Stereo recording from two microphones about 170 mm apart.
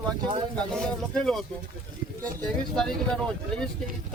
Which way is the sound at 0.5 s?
5° left (ahead or behind).